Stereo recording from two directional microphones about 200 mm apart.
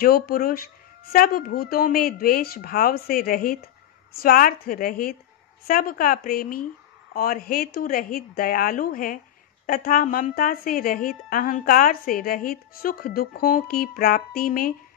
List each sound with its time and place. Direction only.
0.0 s a woman's voice: 50° left (ahead or behind)